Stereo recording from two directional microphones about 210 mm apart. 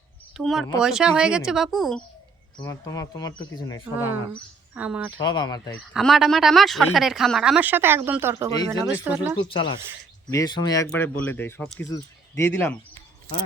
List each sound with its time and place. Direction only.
0.3 s speech: centre (ahead or behind)
2.6 s speech: 15° left (ahead or behind)
3.9 s speech: 10° right (ahead or behind)
5.1 s speech: 20° left (ahead or behind)
5.9 s speech: centre (ahead or behind)
9.5 s speech: 20° left (ahead or behind)